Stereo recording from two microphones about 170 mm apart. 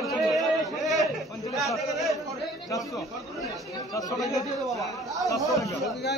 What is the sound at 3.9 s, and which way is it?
Speech, 20° left (ahead or behind).